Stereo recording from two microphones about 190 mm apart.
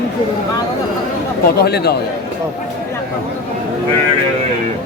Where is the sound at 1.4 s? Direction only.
55° left (ahead or behind).